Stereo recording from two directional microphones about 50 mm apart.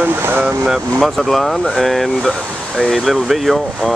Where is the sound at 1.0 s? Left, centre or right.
Centre.